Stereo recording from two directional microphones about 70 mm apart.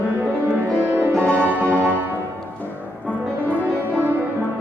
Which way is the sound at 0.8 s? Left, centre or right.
Right.